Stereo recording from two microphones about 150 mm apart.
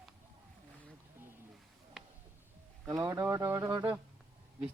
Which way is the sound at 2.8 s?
25° right (ahead or behind).